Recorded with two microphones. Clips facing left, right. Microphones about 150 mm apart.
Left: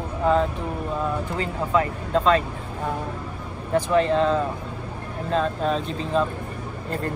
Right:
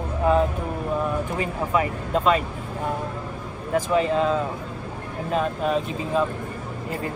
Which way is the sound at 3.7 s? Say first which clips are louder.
Left 1 dB; 10° right (ahead or behind).